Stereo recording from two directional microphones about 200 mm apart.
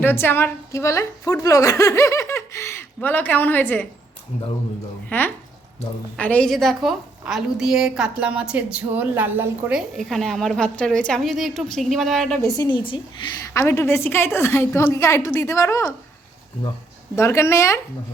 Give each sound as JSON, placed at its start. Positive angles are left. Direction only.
{"t": 0.0, "sound": "a woman's voice", "side_deg": 10}
{"t": 5.0, "sound": "a woman's voice", "side_deg": 10}
{"t": 12.4, "sound": "a woman's voice", "side_deg": 20}
{"t": 13.4, "sound": "a woman's voice", "side_deg": 15}
{"t": 17.2, "sound": "a woman's voice", "side_deg": 15}